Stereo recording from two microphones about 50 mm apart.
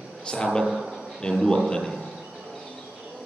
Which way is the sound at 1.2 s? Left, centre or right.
Centre.